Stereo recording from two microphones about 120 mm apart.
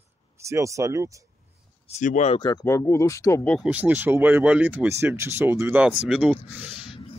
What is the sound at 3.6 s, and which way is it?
Speech, 10° right (ahead or behind).